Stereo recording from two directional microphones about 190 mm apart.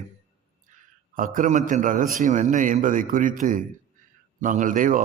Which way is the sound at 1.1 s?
45° right (ahead or behind).